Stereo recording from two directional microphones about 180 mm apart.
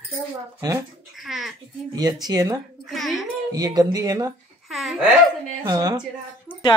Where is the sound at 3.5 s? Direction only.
20° right (ahead or behind).